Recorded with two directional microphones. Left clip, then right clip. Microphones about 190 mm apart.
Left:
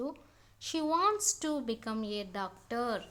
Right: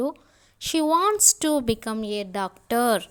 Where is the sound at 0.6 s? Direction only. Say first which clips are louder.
Right 9 dB; 35° right (ahead or behind).